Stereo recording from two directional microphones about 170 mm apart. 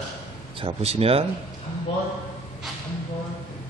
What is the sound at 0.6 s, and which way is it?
Speech, 35° right (ahead or behind).